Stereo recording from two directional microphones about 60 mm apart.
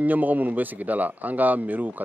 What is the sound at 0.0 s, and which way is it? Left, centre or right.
Speech, right.